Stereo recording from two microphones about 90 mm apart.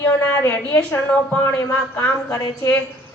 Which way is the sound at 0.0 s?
25° left (ahead or behind).